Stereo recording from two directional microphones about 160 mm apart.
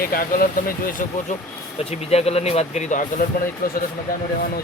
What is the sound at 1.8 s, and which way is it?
A man's voice, 40° left (ahead or behind).